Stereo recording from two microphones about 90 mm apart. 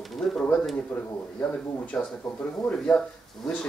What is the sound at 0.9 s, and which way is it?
Speech, 20° left (ahead or behind).